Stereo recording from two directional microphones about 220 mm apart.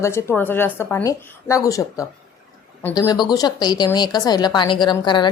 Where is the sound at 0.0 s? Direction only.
10° left (ahead or behind).